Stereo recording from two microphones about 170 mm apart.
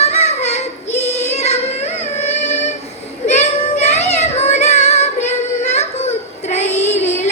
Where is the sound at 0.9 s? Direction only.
40° left (ahead or behind).